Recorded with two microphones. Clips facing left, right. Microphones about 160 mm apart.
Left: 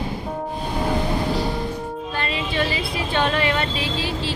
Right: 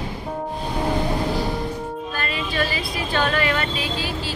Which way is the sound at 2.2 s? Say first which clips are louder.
Left 1 dB; 25° left (ahead or behind).